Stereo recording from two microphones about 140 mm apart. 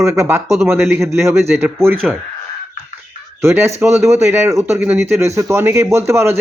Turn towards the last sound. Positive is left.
turn(degrees=-20)  # may be behind; listen again after turning